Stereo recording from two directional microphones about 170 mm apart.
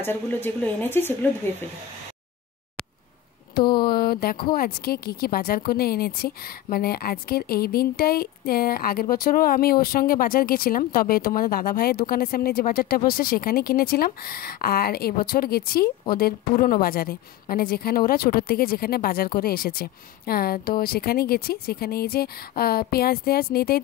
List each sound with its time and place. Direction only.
0.0 s speech: 10° left (ahead or behind)
3.8 s a sound: 60° left (ahead or behind)
4.6 s speech: 60° left (ahead or behind)